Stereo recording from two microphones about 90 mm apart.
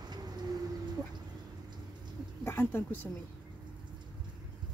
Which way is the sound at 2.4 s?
25° left (ahead or behind).